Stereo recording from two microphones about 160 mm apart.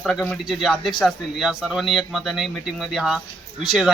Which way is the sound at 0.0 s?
Centre (ahead or behind).